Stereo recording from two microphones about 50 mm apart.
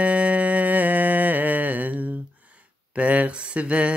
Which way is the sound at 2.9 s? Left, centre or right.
Right.